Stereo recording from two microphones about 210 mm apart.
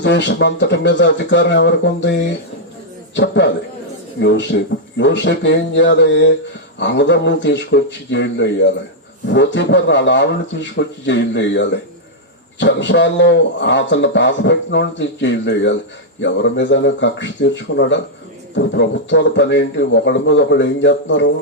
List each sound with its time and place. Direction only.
0.0 s a man's voice: 60° left (ahead or behind)